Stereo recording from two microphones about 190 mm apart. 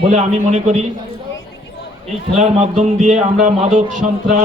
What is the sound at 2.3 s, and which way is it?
A man's voice, 35° right (ahead or behind).